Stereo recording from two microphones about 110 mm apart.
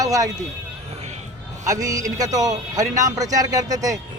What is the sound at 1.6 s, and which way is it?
A man's voice, 30° right (ahead or behind).